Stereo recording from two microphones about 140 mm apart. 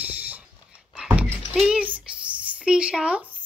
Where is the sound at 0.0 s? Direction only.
10° right (ahead or behind).